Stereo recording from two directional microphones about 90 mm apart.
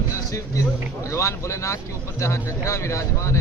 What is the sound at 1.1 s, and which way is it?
Speech, 35° left (ahead or behind).